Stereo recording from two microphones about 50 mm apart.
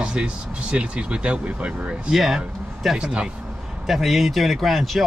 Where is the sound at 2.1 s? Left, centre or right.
Centre.